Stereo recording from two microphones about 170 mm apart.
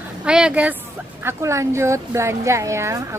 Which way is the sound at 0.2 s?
5° right (ahead or behind).